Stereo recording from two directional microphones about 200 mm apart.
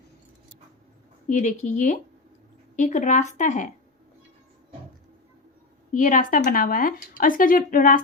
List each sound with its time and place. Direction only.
1.3 s speech: 40° left (ahead or behind)
5.9 s speech: 40° left (ahead or behind)